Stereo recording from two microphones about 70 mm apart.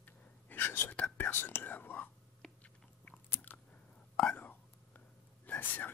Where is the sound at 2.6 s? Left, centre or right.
Left.